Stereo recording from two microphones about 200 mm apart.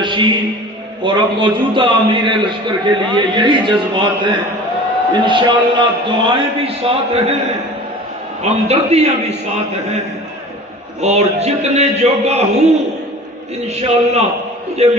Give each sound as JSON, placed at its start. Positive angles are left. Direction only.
{"t": 0.0, "sound": "music", "side_deg": -25}
{"t": 1.0, "sound": "a man's voice", "side_deg": -25}
{"t": 8.4, "sound": "a man's voice", "side_deg": -30}
{"t": 11.0, "sound": "a man's voice", "side_deg": -35}